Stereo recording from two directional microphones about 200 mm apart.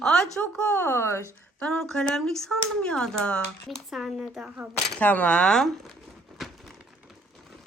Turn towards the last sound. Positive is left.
turn(degrees=0)  # may be behind; listen again after turning